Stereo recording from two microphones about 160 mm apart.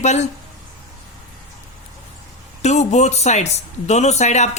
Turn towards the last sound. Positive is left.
turn(degrees=45)  # may be behind; listen again after turning